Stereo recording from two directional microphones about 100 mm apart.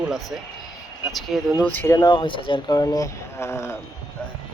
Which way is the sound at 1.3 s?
Centre (ahead or behind).